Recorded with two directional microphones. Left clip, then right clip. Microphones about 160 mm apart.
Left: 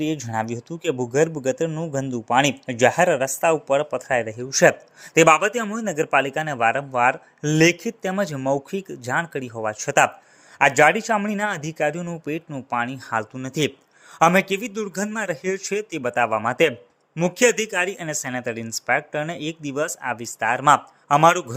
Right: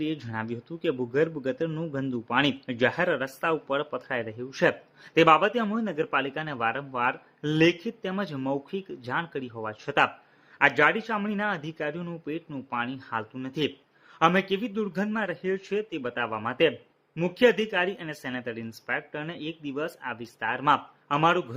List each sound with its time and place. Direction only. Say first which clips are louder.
0.0 s speech: left 7 dB; 25° left (ahead or behind)